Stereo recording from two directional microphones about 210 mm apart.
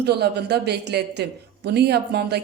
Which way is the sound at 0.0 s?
50° right (ahead or behind).